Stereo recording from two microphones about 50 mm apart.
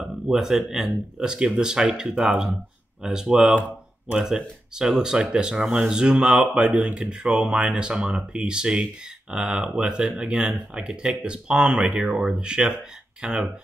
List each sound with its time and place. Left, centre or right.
0.3 s speech: centre
4.7 s speech: centre